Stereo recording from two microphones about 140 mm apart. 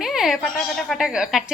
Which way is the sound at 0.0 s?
5° right (ahead or behind).